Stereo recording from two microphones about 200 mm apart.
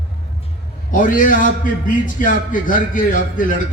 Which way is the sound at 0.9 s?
40° left (ahead or behind).